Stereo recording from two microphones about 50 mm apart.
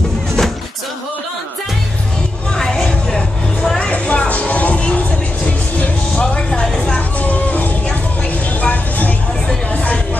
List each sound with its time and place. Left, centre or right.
0.4 s music: centre
2.5 s vehicle: centre
3.9 s music: left
9.7 s a sound: left